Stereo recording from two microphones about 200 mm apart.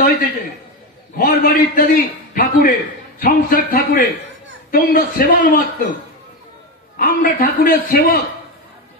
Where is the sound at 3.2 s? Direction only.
45° left (ahead or behind).